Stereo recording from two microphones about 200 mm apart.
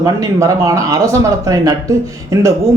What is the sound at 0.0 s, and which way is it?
Speech, 15° right (ahead or behind).